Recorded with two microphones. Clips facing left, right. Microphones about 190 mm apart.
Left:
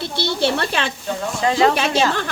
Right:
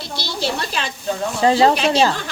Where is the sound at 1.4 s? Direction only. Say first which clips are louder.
Right 2 dB; 30° right (ahead or behind).